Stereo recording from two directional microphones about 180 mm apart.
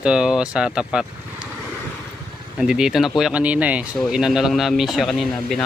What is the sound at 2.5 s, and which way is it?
Speech, 5° right (ahead or behind).